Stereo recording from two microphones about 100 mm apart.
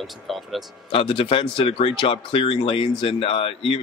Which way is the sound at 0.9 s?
70° left (ahead or behind).